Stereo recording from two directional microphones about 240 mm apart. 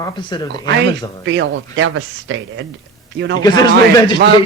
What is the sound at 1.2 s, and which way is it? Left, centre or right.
Speech, right.